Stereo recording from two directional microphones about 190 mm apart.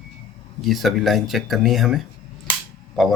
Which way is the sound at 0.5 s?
Centre (ahead or behind).